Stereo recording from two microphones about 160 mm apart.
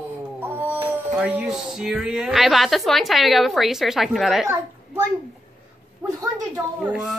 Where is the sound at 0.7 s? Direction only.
10° right (ahead or behind).